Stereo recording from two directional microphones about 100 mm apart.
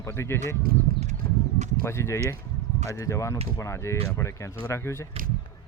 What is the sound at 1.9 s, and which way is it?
Speech, 25° left (ahead or behind).